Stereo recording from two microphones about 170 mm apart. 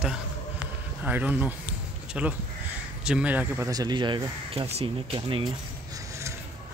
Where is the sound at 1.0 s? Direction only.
10° right (ahead or behind); by 5.5 s 30° right (ahead or behind).